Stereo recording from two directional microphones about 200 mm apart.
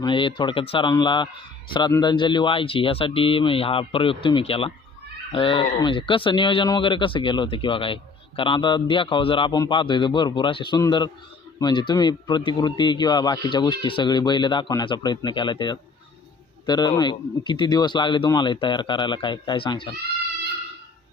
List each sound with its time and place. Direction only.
0.0 s speech: 25° left (ahead or behind)